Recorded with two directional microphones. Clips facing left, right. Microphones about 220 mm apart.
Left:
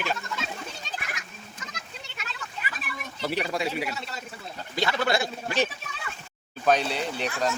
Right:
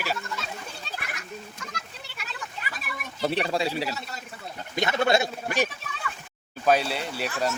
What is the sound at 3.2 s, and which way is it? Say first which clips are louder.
Speech: right 3 dB; 30° right (ahead or behind).